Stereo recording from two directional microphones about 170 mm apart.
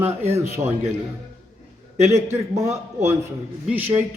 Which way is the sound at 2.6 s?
15° right (ahead or behind).